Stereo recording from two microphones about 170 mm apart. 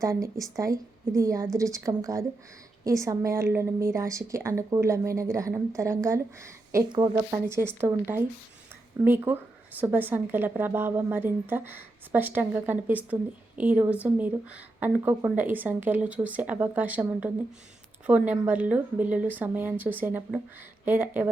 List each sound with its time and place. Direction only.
0.0 s a woman's voice: 20° right (ahead or behind)